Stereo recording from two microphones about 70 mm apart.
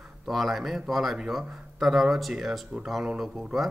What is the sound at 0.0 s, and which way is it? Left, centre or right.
A man's voice, centre.